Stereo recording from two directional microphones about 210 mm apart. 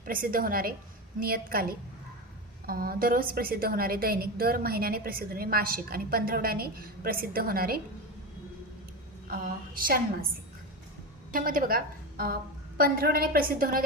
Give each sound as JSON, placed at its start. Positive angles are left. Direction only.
{"t": 0.0, "sound": "a woman's voice", "side_deg": -40}
{"t": 9.2, "sound": "a woman's voice", "side_deg": -45}
{"t": 11.3, "sound": "a woman's voice", "side_deg": -40}